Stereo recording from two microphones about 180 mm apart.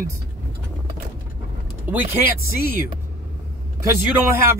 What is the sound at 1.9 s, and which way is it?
Speech, 10° right (ahead or behind).